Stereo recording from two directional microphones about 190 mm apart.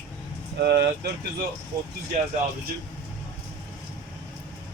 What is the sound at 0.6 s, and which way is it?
Speech, 60° right (ahead or behind).